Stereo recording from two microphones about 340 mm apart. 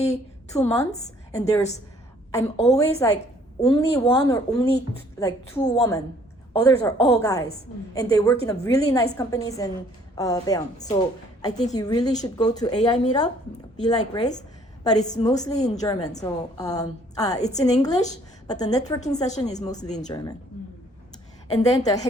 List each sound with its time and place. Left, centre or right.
0.0 s a sound: centre
0.8 s a woman's voice: centre
21.5 s a woman's voice: centre